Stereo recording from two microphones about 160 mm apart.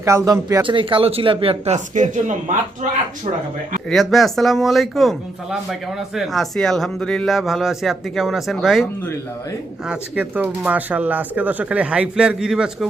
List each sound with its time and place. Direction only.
0.0 s speech: 20° right (ahead or behind)
0.7 s speech: 30° right (ahead or behind); by 3.0 s 50° right (ahead or behind)
3.8 s speech: centre (ahead or behind)